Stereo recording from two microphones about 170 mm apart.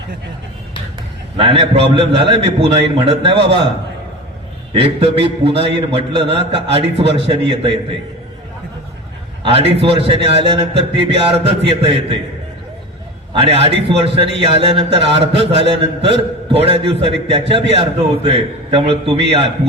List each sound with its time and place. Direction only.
1.4 s a man's voice: 35° right (ahead or behind)
4.7 s a man's voice: 35° right (ahead or behind)
9.4 s a man's voice: 35° right (ahead or behind)
13.4 s a man's voice: 35° right (ahead or behind)